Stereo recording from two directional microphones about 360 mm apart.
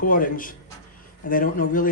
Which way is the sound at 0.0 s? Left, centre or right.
Left.